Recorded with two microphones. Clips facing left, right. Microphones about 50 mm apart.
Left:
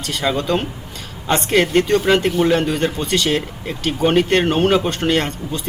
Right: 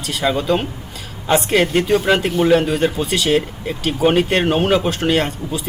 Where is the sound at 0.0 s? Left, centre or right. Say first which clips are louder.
Right 1 dB; centre.